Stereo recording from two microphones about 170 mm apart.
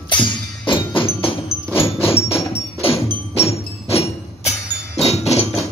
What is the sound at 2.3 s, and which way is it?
Music, 15° left (ahead or behind).